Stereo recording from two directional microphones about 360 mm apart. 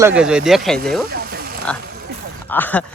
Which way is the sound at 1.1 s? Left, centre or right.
Right.